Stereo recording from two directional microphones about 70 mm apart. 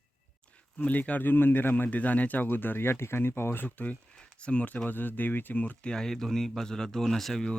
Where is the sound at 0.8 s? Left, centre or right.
Left.